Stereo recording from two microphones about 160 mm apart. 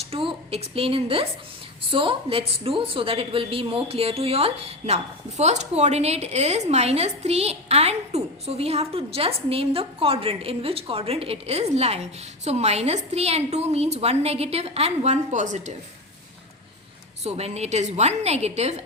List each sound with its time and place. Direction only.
0.1 s a woman's voice: 35° right (ahead or behind)
17.2 s a woman's voice: 40° right (ahead or behind)